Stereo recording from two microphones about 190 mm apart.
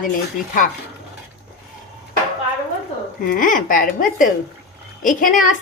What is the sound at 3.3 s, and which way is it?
Speech, 45° left (ahead or behind).